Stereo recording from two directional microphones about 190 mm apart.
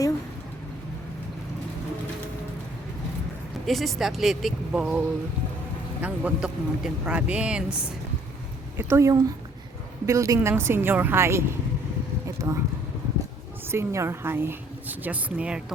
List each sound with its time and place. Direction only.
3.7 s speech: centre (ahead or behind)
8.8 s speech: 15° right (ahead or behind)
13.7 s speech: 15° right (ahead or behind)